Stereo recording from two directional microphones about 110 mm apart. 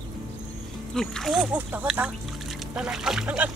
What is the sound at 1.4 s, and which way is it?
Speech, 15° right (ahead or behind).